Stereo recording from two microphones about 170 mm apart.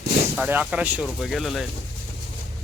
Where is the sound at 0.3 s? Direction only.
10° right (ahead or behind).